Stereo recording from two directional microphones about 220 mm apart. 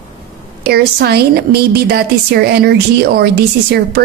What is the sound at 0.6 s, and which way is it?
A woman's voice, 45° right (ahead or behind).